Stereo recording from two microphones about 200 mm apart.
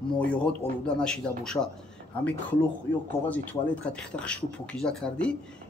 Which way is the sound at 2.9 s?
65° left (ahead or behind).